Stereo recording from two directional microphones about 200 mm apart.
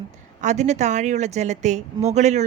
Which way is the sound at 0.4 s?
35° right (ahead or behind).